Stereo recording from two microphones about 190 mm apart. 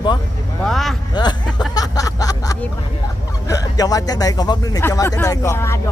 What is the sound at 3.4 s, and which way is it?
Speech, 20° left (ahead or behind).